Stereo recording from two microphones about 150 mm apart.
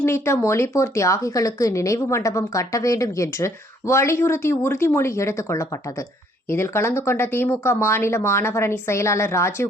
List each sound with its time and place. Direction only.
0.0 s speech: 20° left (ahead or behind)